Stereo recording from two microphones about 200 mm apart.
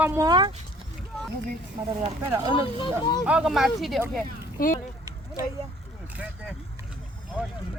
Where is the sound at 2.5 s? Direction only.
25° left (ahead or behind).